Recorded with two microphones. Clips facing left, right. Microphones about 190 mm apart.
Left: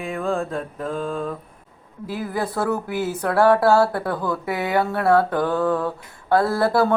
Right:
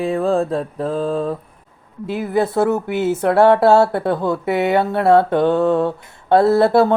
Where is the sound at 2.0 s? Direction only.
25° right (ahead or behind).